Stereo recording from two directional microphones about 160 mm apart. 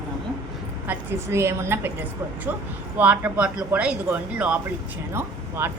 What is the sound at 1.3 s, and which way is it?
Speech, 15° right (ahead or behind).